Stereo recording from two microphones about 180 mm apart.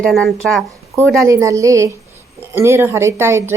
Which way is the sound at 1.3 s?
15° right (ahead or behind).